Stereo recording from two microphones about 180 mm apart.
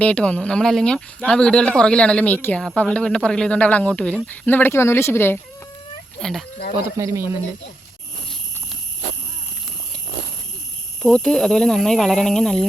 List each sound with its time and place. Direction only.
0.0 s speech: 5° left (ahead or behind)
6.1 s speech: centre (ahead or behind)
6.9 s speech: 15° right (ahead or behind)
11.0 s speech: 5° left (ahead or behind)